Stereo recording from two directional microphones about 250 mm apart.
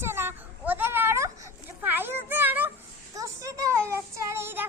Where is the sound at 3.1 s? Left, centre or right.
Centre.